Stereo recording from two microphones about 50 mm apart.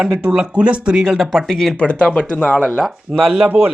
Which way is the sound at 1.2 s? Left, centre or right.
Centre.